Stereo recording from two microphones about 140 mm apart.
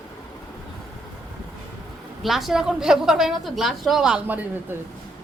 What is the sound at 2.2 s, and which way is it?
A woman's voice, centre (ahead or behind).